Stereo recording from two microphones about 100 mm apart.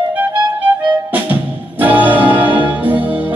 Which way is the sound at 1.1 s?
15° right (ahead or behind).